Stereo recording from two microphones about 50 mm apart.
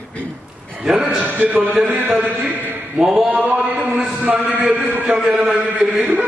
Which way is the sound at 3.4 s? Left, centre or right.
Right.